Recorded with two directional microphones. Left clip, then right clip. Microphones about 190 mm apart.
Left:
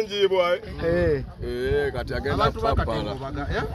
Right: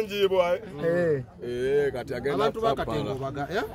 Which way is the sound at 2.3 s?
60° right (ahead or behind).